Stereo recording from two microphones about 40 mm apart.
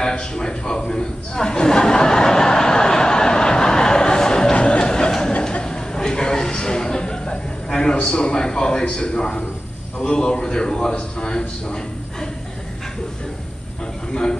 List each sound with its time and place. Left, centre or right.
0.0 s a sound: centre
10.0 s a man's voice: left
14.1 s a man's voice: centre